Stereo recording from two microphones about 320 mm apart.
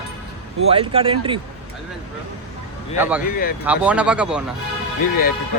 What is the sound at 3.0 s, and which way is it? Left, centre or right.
Speech, centre.